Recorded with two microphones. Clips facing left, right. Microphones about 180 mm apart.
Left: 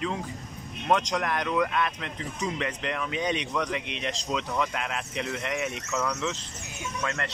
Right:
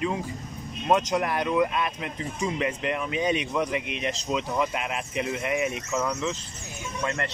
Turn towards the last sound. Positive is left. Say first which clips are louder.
# right 2 dB
turn(degrees=-5)  # may be behind; listen again after turning